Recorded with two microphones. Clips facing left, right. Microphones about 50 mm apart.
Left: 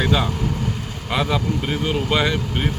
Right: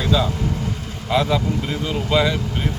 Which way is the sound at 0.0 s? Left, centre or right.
Left.